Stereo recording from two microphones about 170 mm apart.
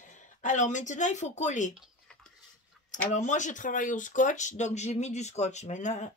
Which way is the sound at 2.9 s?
45° left (ahead or behind).